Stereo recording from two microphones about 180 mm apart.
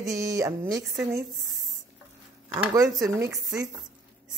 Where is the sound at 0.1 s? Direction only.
20° right (ahead or behind).